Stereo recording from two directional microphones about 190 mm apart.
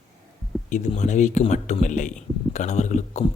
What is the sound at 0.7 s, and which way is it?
Speech, 40° left (ahead or behind).